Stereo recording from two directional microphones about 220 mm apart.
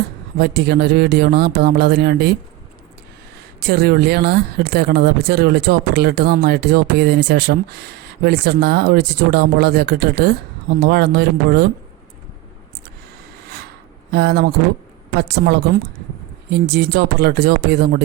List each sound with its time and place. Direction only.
0.3 s speech: 50° right (ahead or behind)
3.7 s speech: 45° right (ahead or behind)
14.1 s speech: 50° right (ahead or behind)